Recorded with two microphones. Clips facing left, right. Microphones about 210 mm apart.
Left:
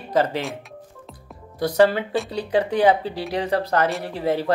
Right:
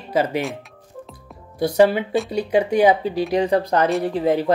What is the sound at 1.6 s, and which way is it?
Speech, 10° right (ahead or behind).